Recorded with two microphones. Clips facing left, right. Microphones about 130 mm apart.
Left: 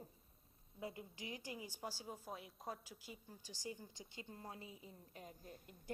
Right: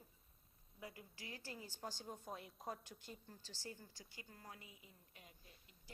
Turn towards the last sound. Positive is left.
turn(degrees=50)  # may be behind; listen again after turning